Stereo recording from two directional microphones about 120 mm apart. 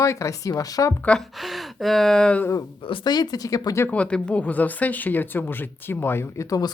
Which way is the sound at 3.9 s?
10° left (ahead or behind).